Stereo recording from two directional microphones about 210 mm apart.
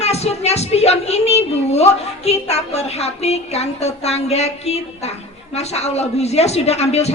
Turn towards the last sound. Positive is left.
turn(degrees=30)  # may be behind; listen again after turning